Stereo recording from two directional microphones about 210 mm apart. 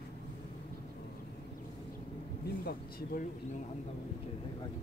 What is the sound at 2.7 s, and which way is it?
Speech, 45° left (ahead or behind).